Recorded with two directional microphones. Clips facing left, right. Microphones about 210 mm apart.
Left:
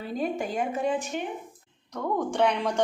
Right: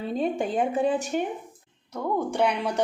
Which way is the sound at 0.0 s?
25° right (ahead or behind).